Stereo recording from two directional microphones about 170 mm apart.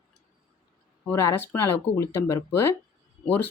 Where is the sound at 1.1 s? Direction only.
15° left (ahead or behind).